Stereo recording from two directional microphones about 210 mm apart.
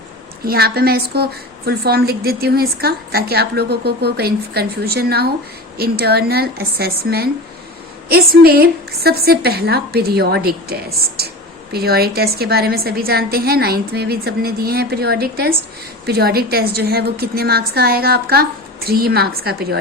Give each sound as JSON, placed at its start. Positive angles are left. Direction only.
{"t": 0.4, "sound": "a woman's voice", "side_deg": -50}